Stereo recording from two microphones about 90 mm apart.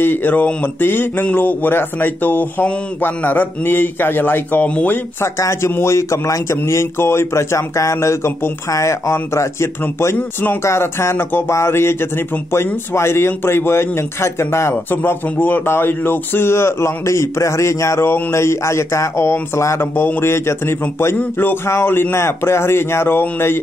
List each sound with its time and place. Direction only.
0.0 s speech: 20° left (ahead or behind)
5.4 s speech: 30° left (ahead or behind)